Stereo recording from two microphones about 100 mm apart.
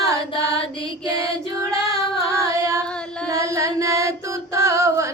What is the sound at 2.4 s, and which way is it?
Singing, 35° right (ahead or behind).